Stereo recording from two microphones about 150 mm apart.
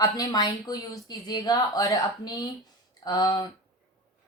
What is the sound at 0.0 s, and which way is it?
Speech, 25° left (ahead or behind).